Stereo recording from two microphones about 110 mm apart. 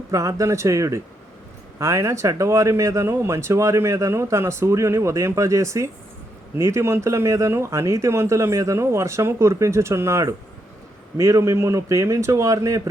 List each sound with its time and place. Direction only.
0.1 s speech: 30° right (ahead or behind)